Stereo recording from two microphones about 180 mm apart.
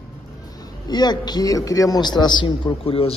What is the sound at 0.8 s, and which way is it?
A man's voice, 25° left (ahead or behind).